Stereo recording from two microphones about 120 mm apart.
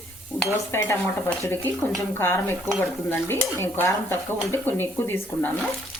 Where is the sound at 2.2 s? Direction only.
20° left (ahead or behind).